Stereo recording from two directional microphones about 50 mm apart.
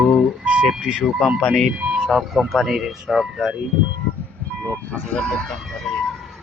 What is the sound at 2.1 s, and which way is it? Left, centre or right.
Speech, centre.